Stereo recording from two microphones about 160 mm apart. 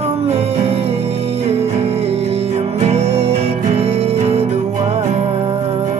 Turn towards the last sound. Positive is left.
turn(degrees=-40)  # may be behind; listen again after turning